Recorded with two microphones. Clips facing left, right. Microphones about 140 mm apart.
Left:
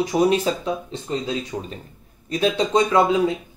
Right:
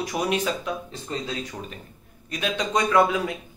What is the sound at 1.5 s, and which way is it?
Speech, 20° left (ahead or behind).